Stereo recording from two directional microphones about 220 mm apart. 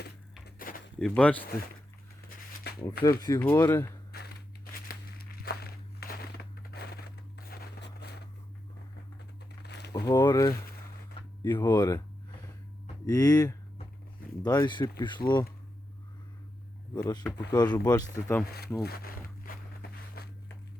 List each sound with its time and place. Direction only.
0.4 s a sound: 40° left (ahead or behind)
0.9 s speech: 5° left (ahead or behind)
3.0 s speech: 15° left (ahead or behind)
4.1 s a sound: 45° left (ahead or behind)
9.6 s a sound: 50° left (ahead or behind)
9.9 s speech: 15° left (ahead or behind)
13.1 s speech: 15° left (ahead or behind)
16.9 s speech: 15° left (ahead or behind)
18.8 s zipper: 45° left (ahead or behind)